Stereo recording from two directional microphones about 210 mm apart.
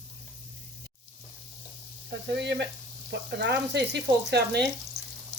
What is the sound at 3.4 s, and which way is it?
Speech, 55° right (ahead or behind).